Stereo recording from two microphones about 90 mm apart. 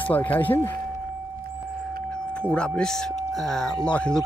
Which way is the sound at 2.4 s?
10° left (ahead or behind).